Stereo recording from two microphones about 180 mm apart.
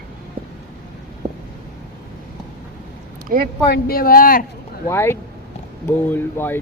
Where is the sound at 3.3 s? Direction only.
55° right (ahead or behind).